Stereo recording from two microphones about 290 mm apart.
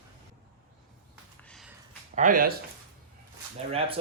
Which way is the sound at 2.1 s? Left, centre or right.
Right.